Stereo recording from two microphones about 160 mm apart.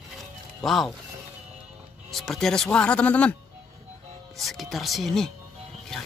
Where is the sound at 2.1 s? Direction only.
Centre (ahead or behind).